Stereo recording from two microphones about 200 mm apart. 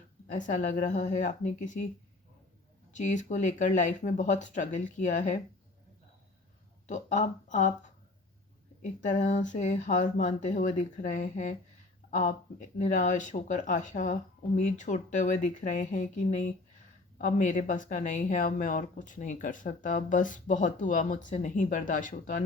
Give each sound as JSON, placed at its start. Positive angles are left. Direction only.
{"t": 0.3, "sound": "speech", "side_deg": 40}
{"t": 2.9, "sound": "speech", "side_deg": 35}
{"t": 6.8, "sound": "speech", "side_deg": 35}
{"t": 9.0, "sound": "speech", "side_deg": 35}